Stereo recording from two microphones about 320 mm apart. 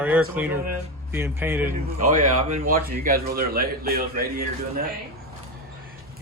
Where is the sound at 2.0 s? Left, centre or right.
Right.